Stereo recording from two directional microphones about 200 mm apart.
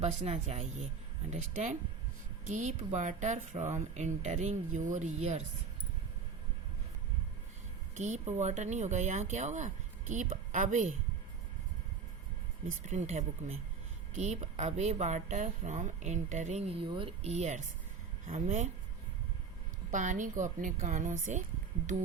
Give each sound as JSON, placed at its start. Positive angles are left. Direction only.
{"t": 0.0, "sound": "speech", "side_deg": -35}
{"t": 7.9, "sound": "speech", "side_deg": -35}
{"t": 12.8, "sound": "speech", "side_deg": -35}
{"t": 19.9, "sound": "speech", "side_deg": -40}